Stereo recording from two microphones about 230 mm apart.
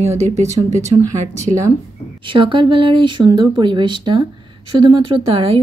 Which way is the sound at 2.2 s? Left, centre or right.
Right.